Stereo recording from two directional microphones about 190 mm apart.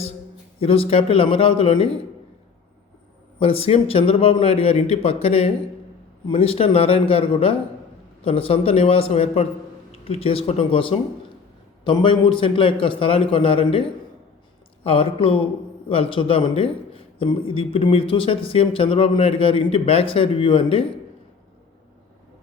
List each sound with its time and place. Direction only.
0.6 s speech: 30° left (ahead or behind)
3.3 s a man's voice: 30° left (ahead or behind)
14.8 s speech: 30° left (ahead or behind)